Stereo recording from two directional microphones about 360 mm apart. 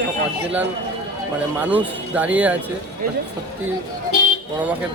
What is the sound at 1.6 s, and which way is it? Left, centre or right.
Speech, centre.